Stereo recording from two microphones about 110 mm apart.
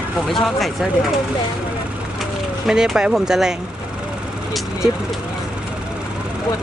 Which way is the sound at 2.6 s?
5° right (ahead or behind).